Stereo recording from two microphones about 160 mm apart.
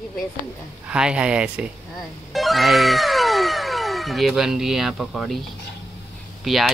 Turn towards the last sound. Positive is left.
turn(degrees=0)  # may be behind; listen again after turning